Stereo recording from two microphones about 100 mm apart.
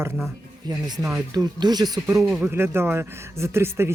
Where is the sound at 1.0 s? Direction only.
30° right (ahead or behind).